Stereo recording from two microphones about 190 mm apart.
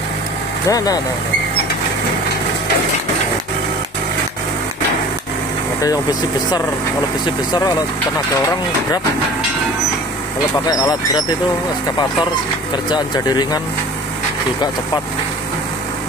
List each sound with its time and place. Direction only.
0.7 s speech: 20° left (ahead or behind)
10.7 s speech: 20° left (ahead or behind)
12.9 s speech: 20° left (ahead or behind)